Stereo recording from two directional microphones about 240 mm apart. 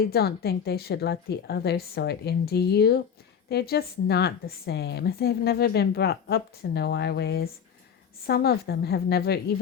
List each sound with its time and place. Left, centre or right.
0.1 s a woman's voice: left